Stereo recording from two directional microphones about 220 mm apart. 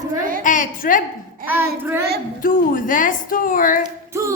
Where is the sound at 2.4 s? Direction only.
40° left (ahead or behind).